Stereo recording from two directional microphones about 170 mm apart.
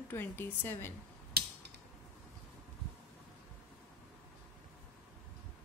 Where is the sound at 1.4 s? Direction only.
70° right (ahead or behind).